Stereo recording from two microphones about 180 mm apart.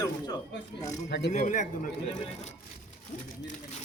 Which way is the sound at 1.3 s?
45° left (ahead or behind).